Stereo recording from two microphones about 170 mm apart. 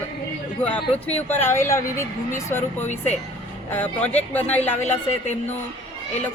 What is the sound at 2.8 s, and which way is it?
Speech, 45° left (ahead or behind).